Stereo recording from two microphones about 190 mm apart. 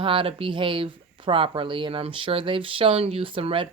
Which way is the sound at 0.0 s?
30° right (ahead or behind).